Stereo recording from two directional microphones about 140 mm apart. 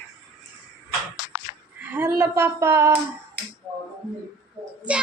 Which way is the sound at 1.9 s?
15° right (ahead or behind).